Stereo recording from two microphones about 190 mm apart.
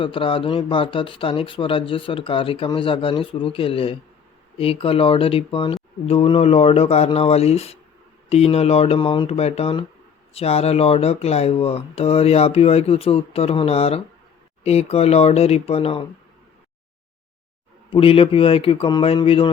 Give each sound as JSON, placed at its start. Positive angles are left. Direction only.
{"t": 0.0, "sound": "speech", "side_deg": 30}
{"t": 17.9, "sound": "speech", "side_deg": 30}